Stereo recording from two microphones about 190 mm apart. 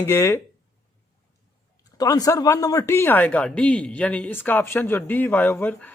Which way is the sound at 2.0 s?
20° left (ahead or behind).